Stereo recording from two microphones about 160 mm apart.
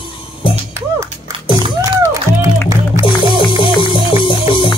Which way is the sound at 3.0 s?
30° left (ahead or behind).